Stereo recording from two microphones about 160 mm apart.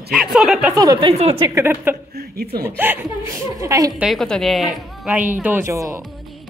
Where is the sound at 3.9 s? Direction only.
Centre (ahead or behind).